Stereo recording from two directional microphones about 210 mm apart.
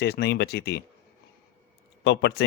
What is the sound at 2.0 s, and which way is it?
Speech, 55° left (ahead or behind).